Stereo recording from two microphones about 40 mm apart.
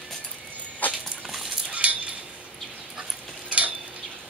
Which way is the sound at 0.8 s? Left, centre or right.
Left.